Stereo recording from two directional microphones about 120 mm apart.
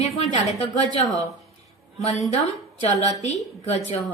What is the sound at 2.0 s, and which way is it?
Speech, 60° left (ahead or behind).